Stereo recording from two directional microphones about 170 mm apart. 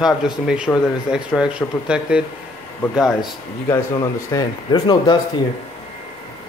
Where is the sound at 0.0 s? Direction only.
5° right (ahead or behind).